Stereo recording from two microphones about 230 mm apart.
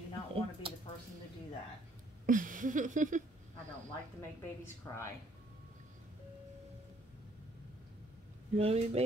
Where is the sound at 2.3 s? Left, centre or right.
Right.